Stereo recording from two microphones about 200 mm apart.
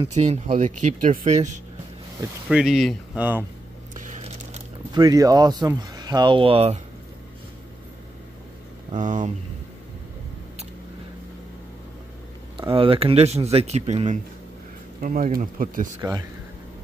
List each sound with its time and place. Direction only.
0.0 s speech: 35° right (ahead or behind)
2.5 s speech: centre (ahead or behind)
4.9 s speech: 20° right (ahead or behind)
8.9 s speech: 40° right (ahead or behind)
12.5 s speech: 25° right (ahead or behind); by 15.9 s 45° right (ahead or behind)
16.0 s speech: 20° right (ahead or behind)